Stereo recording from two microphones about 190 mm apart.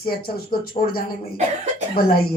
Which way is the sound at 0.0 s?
55° left (ahead or behind).